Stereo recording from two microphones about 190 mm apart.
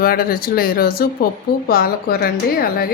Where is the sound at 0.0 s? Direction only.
50° left (ahead or behind).